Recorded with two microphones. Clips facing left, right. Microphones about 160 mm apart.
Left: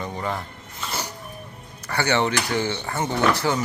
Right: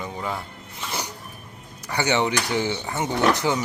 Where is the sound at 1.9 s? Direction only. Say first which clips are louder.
Even; 15° right (ahead or behind).